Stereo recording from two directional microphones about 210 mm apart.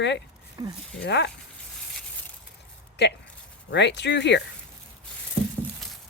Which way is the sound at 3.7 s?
55° left (ahead or behind).